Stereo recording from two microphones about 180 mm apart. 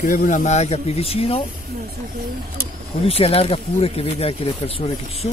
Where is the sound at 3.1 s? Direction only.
35° left (ahead or behind).